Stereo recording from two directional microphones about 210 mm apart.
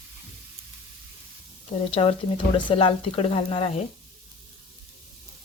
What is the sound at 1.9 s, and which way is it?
Speech, 25° left (ahead or behind).